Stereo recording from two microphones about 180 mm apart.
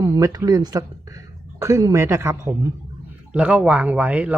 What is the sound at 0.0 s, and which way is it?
Speech, 20° right (ahead or behind).